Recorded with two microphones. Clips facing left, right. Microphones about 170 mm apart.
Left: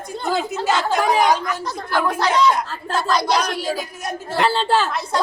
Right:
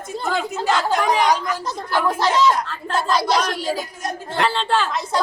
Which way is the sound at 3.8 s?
10° left (ahead or behind).